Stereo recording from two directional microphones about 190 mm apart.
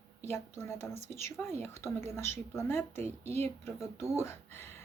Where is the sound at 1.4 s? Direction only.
10° left (ahead or behind).